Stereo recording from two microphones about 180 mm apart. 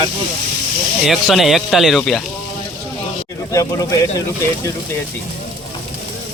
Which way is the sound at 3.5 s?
20° left (ahead or behind).